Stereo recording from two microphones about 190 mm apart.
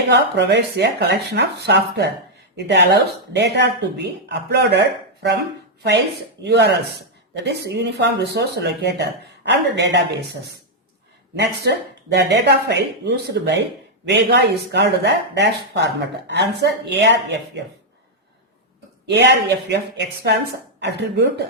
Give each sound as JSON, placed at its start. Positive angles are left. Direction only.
{"t": 0.1, "sound": "speech", "side_deg": -65}
{"t": 6.4, "sound": "speech", "side_deg": -65}
{"t": 19.0, "sound": "speech", "side_deg": -65}